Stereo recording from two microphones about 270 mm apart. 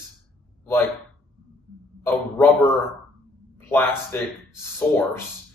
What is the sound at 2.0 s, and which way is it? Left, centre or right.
Speech, centre.